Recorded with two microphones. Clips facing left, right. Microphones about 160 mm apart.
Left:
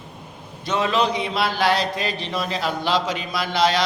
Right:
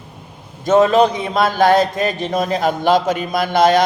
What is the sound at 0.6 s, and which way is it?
Speech, 45° right (ahead or behind).